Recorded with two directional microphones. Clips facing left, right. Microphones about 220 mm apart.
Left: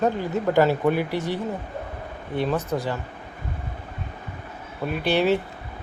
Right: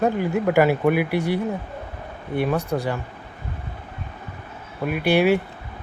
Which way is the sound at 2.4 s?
10° right (ahead or behind).